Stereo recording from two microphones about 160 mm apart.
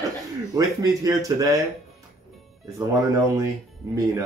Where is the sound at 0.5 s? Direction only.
20° right (ahead or behind).